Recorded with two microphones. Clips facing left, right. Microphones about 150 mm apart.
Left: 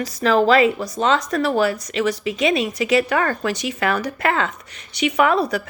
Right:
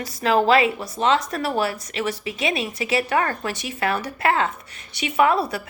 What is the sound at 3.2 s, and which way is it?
Speech, 40° left (ahead or behind).